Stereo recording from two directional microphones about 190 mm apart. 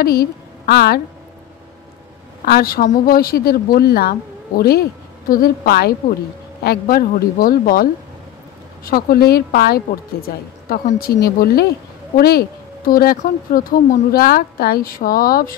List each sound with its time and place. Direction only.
0.0 s a woman's voice: 55° left (ahead or behind)
2.4 s speech: 50° left (ahead or behind)